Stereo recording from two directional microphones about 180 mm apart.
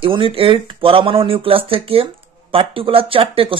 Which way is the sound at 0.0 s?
30° right (ahead or behind).